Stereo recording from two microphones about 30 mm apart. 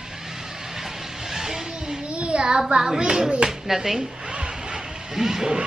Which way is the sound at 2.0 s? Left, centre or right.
Right.